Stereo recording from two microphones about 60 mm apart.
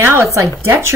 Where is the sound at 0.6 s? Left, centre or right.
Right.